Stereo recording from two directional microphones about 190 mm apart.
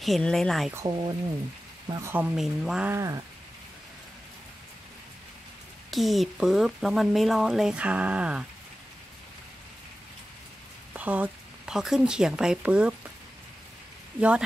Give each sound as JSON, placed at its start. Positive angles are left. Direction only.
{"t": 0.0, "sound": "speech", "side_deg": 0}
{"t": 0.8, "sound": "speech", "side_deg": -20}
{"t": 5.9, "sound": "speech", "side_deg": 0}
{"t": 10.9, "sound": "speech", "side_deg": -10}